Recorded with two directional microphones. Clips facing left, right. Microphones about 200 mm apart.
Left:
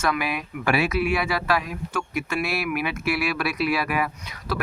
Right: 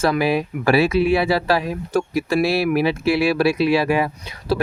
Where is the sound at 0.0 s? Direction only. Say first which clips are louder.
Right 8 dB; 30° right (ahead or behind).